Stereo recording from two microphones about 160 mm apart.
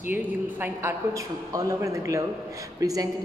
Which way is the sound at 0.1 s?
15° right (ahead or behind).